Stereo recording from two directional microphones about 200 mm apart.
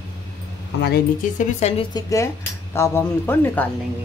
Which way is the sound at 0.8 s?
50° left (ahead or behind).